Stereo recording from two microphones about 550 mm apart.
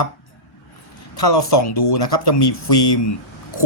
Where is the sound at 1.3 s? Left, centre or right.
Left.